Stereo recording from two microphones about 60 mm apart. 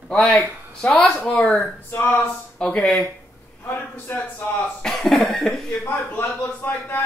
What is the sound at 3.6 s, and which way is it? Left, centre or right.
Speech, left.